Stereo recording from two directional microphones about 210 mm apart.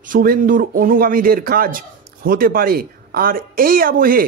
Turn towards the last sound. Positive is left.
turn(degrees=-40)  # may be behind; listen again after turning